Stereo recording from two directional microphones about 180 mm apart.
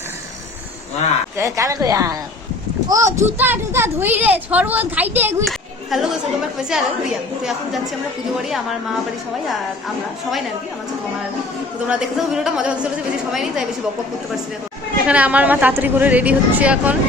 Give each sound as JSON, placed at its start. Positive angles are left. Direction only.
{"t": 1.4, "sound": "a child's voice", "side_deg": -15}
{"t": 5.5, "sound": "a child's voice", "side_deg": 0}
{"t": 11.9, "sound": "speech", "side_deg": -5}
{"t": 15.0, "sound": "a child's voice", "side_deg": -10}